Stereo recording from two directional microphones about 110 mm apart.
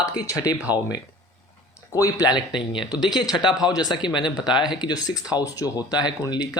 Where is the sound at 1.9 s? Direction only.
35° left (ahead or behind).